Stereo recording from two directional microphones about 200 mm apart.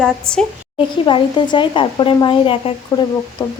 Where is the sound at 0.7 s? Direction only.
25° left (ahead or behind).